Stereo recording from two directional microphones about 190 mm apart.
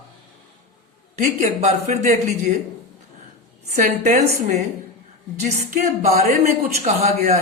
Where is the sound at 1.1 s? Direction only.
40° right (ahead or behind).